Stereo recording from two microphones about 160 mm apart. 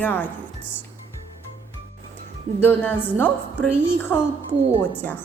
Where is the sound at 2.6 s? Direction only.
10° left (ahead or behind).